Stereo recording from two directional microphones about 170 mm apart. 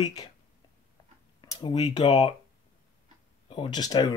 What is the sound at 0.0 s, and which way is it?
Speech, 20° left (ahead or behind).